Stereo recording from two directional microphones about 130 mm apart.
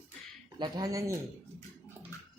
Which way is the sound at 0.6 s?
25° right (ahead or behind).